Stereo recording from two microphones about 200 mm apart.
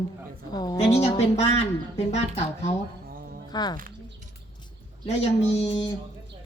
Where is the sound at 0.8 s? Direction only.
35° left (ahead or behind).